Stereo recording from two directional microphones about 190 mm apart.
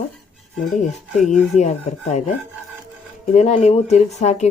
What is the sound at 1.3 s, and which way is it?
Speech, 40° left (ahead or behind).